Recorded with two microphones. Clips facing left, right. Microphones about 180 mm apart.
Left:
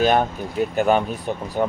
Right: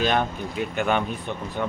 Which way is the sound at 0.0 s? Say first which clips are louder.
Left 5 dB; 40° left (ahead or behind).